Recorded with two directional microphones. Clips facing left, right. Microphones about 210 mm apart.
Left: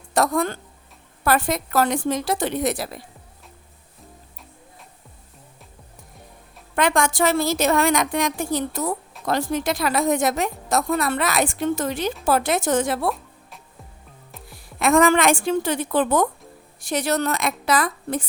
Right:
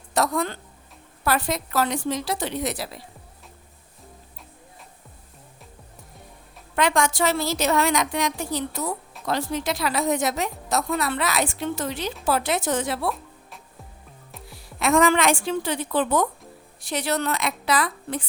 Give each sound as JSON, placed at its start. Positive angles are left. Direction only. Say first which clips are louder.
{"t": 0.1, "sound": "speech", "louder": "left 3 dB", "side_deg": 50}
{"t": 6.7, "sound": "speech", "louder": "left 2 dB", "side_deg": 50}
{"t": 14.5, "sound": "speech", "louder": "left 3 dB", "side_deg": 50}